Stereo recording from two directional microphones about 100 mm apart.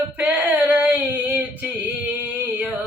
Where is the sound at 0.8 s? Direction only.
20° right (ahead or behind).